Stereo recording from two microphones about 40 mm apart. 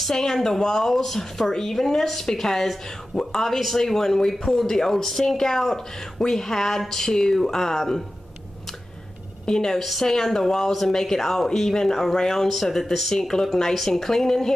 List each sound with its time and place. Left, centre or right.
0.1 s speech: centre
9.5 s speech: centre